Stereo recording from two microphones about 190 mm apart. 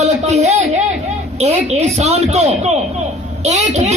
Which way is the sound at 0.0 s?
35° right (ahead or behind).